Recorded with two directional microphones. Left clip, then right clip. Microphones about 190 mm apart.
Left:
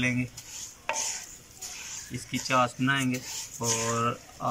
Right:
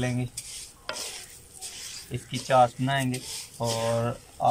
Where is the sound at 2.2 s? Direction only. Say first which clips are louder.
Right 5 dB; 40° right (ahead or behind).